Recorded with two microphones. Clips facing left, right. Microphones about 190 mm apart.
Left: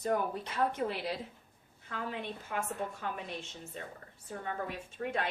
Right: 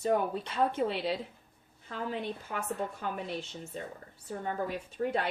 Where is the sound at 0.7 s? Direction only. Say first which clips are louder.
Right 4 dB; 30° right (ahead or behind).